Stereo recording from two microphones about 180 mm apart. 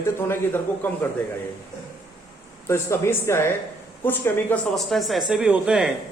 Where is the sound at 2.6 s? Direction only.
15° left (ahead or behind).